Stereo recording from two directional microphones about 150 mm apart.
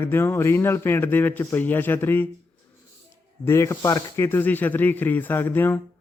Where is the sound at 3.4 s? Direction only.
20° left (ahead or behind).